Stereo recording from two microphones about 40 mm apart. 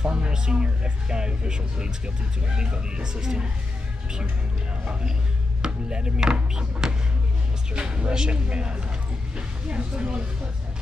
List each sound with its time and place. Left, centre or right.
0.0 s music: right
0.3 s speech: right
5.6 s speech: right